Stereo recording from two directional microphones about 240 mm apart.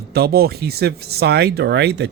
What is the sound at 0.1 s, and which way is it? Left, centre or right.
Speech, right.